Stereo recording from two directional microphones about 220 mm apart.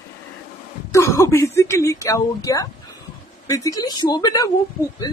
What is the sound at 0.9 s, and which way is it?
Speech, 15° left (ahead or behind).